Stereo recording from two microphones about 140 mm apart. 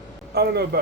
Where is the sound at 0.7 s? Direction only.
90° right.